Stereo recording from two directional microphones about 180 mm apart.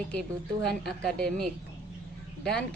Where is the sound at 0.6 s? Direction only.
5° left (ahead or behind).